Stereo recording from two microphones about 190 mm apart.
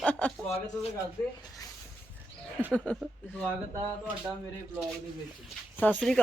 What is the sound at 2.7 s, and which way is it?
Speech, 5° left (ahead or behind).